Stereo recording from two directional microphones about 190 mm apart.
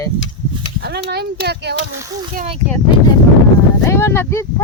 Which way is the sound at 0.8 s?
60° right (ahead or behind).